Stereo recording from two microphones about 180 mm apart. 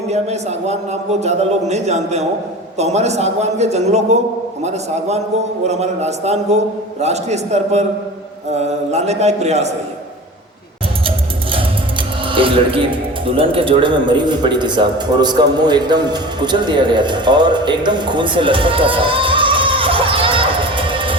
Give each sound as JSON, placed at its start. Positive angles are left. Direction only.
{"t": 0.1, "sound": "a man's voice", "side_deg": -35}
{"t": 11.5, "sound": "speech", "side_deg": -30}